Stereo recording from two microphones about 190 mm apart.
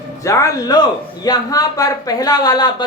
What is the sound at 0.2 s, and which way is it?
A woman's voice, 15° left (ahead or behind).